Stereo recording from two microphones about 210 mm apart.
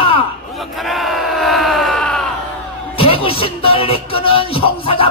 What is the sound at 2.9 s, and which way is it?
Music, 25° left (ahead or behind).